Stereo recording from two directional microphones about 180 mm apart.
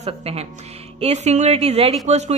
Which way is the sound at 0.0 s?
35° right (ahead or behind).